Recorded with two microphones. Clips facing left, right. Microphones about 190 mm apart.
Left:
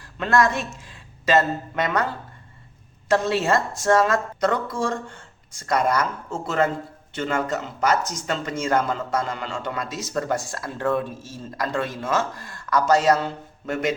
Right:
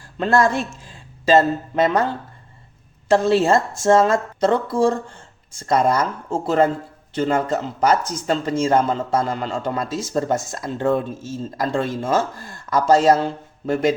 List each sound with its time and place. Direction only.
0.2 s speech: 30° right (ahead or behind)
3.1 s speech: 30° right (ahead or behind)